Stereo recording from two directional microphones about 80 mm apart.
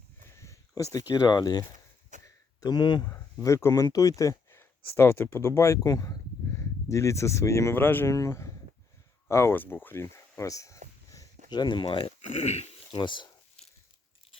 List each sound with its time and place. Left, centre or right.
0.2 s a sound: left
0.8 s speech: left
1.3 s speech: left
2.2 s a sound: left
2.7 s speech: left
3.1 s speech: left
4.5 s speech: left
5.8 s speech: left
6.5 s speech: left
8.1 s speech: left
11.5 s speech: left
12.9 s speech: left